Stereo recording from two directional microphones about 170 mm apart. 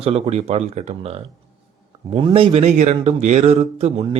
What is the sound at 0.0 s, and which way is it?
A man's voice, 35° right (ahead or behind).